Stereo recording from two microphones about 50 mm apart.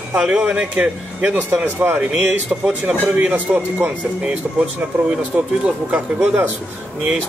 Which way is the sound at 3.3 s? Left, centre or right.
Right.